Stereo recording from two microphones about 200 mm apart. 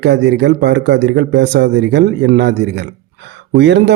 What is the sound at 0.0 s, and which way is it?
Speech, 60° right (ahead or behind).